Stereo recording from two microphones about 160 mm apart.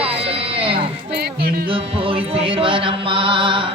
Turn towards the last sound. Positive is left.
turn(degrees=-35)  # may be behind; listen again after turning